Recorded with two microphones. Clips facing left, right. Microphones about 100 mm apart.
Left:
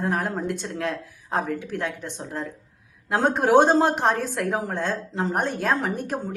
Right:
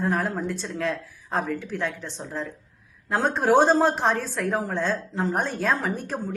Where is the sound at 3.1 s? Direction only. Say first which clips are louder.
Left 2 dB; 60° left (ahead or behind).